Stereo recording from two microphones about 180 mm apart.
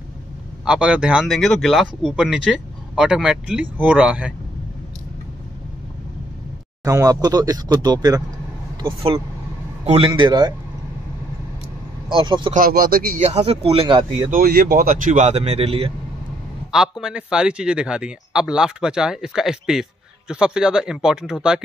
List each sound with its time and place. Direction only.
0.7 s speech: 5° right (ahead or behind)
6.8 s speech: 20° right (ahead or behind)
12.1 s speech: 25° right (ahead or behind)
12.5 s speech: 55° right (ahead or behind)
13.2 s speech: 35° right (ahead or behind)
14.3 s speech: 55° right (ahead or behind); by 15.9 s 35° right (ahead or behind)
17.0 s speech: 5° right (ahead or behind)